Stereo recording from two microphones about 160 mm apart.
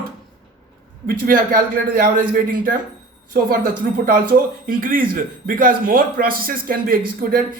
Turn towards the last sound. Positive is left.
turn(degrees=-65)  # may be behind; listen again after turning